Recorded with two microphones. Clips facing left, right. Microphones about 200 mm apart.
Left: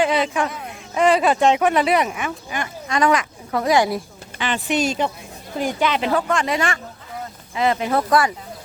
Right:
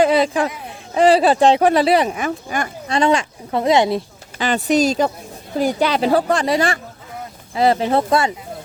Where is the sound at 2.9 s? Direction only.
30° right (ahead or behind).